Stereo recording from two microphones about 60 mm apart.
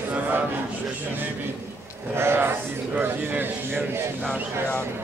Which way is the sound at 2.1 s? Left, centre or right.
Right.